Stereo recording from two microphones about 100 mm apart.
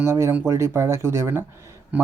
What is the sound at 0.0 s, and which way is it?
Speech, 25° right (ahead or behind).